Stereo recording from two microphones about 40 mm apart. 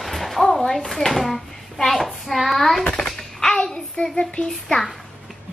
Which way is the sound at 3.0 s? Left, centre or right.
Centre.